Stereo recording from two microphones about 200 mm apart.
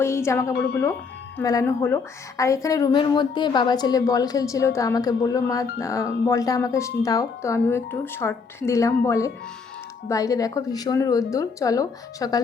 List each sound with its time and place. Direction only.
0.0 s a woman's voice: 15° left (ahead or behind)